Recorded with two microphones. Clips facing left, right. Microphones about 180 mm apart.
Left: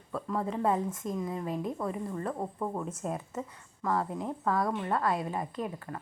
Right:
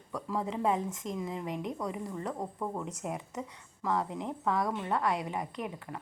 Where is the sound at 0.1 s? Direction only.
20° right (ahead or behind).